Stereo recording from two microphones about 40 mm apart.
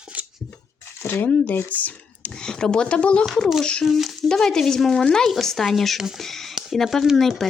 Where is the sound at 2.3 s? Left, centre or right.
Centre.